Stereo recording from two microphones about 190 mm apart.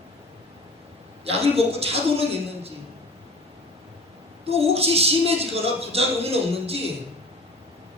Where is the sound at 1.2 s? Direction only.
30° right (ahead or behind).